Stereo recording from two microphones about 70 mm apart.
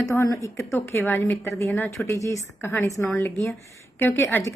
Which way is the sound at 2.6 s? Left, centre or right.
Left.